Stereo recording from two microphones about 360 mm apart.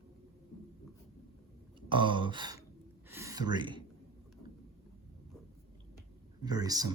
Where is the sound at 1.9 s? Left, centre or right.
Centre.